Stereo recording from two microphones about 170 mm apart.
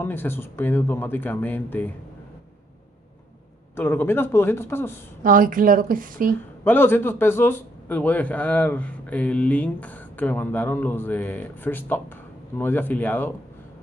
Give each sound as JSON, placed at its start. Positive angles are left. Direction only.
{"t": 0.0, "sound": "a man's voice", "side_deg": 10}
{"t": 3.7, "sound": "a man's voice", "side_deg": 10}
{"t": 5.2, "sound": "a woman's voice", "side_deg": -55}
{"t": 6.6, "sound": "a man's voice", "side_deg": 10}